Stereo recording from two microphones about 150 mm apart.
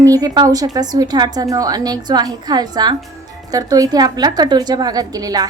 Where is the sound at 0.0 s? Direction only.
25° right (ahead or behind).